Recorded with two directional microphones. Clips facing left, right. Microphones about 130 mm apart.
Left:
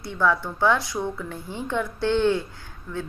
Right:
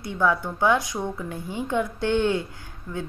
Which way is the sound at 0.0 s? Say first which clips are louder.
Even; 20° right (ahead or behind).